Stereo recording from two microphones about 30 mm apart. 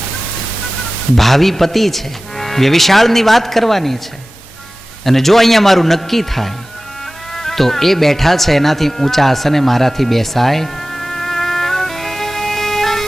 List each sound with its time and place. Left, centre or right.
1.1 s a man's voice: centre
5.0 s a man's voice: centre
7.3 s music: centre